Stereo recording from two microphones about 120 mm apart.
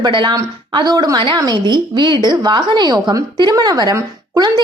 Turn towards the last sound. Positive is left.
turn(degrees=-35)  # may be behind; listen again after turning